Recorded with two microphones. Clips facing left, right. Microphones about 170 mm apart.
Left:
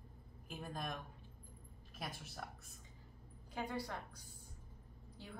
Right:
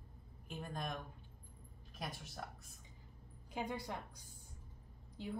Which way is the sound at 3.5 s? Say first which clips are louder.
Right 1 dB; 20° right (ahead or behind).